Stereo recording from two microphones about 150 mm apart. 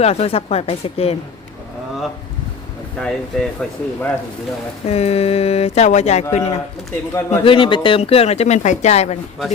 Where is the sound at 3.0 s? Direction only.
5° left (ahead or behind).